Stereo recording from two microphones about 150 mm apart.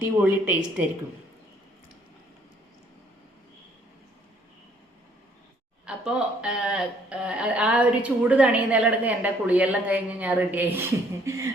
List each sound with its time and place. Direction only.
0.2 s speech: 10° right (ahead or behind)
5.8 s speech: 5° right (ahead or behind)
11.3 s beatboxing: 20° right (ahead or behind)